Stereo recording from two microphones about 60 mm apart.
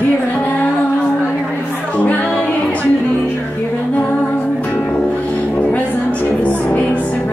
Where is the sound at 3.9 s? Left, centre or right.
Left.